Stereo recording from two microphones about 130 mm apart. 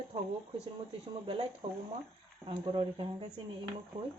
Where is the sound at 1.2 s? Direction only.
45° right (ahead or behind).